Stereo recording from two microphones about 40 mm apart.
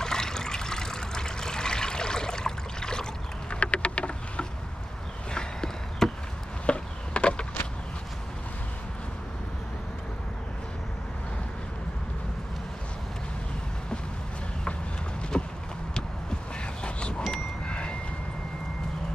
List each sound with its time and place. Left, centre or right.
0.0 s water: centre
3.5 s insect: left
5.3 s walk: centre
6.6 s a sound: left
15.3 s clip-clop: left
17.3 s vehicle: left